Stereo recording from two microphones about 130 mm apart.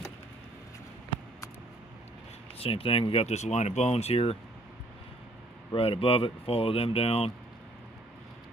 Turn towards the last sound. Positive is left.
turn(degrees=50)  # may be behind; listen again after turning